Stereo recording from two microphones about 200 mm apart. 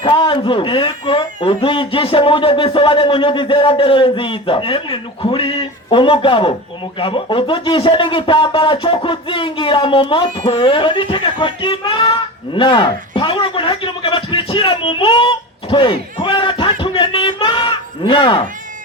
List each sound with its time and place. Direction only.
0.0 s speech: 25° left (ahead or behind)